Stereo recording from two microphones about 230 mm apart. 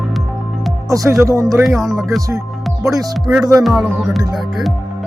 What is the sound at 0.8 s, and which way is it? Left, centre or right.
Speech, centre.